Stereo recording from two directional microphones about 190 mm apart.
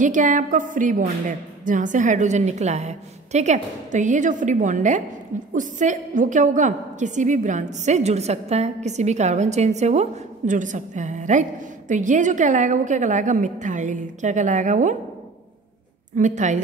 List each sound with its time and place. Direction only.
0.0 s a woman's voice: 40° right (ahead or behind)
16.2 s a woman's voice: 40° right (ahead or behind)